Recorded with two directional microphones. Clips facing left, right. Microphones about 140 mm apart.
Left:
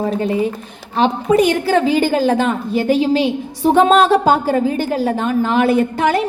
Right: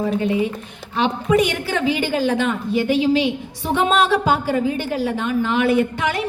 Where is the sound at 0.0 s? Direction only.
40° left (ahead or behind).